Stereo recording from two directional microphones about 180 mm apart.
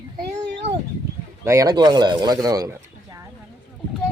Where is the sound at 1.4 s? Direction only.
15° right (ahead or behind).